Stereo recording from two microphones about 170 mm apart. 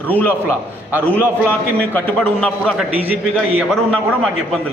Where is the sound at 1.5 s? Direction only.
10° left (ahead or behind).